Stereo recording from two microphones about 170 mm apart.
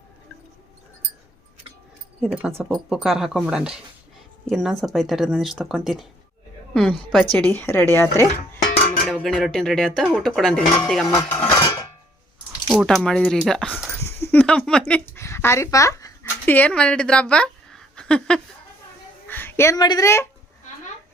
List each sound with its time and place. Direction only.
2.2 s a woman's voice: 5° right (ahead or behind); by 8.3 s 15° left (ahead or behind)
9.0 s speech: 5° left (ahead or behind)
12.6 s speech: centre (ahead or behind); by 16.6 s 20° left (ahead or behind)
16.6 s a woman's voice: 5° left (ahead or behind)